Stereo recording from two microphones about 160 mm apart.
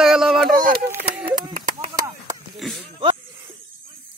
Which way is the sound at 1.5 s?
60° right (ahead or behind).